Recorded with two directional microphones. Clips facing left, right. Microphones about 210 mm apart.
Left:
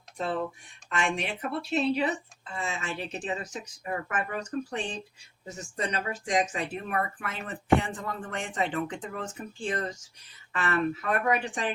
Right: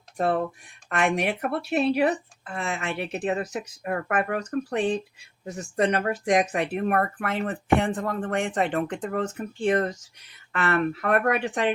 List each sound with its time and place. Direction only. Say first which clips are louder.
0.9 s speech: right 6 dB; 55° right (ahead or behind)